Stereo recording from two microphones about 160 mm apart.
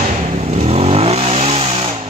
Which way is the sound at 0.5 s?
40° right (ahead or behind).